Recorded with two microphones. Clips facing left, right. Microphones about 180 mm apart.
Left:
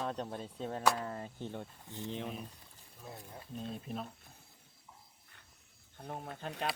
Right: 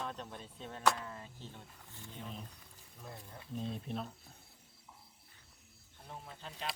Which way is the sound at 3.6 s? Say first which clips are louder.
Right 1 dB; centre (ahead or behind).